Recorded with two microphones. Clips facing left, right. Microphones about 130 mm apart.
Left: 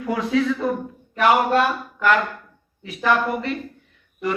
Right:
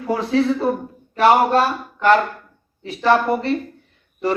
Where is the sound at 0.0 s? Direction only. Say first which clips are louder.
Right 2 dB; 35° right (ahead or behind).